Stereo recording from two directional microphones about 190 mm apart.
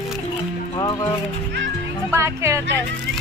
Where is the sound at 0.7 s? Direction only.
20° left (ahead or behind).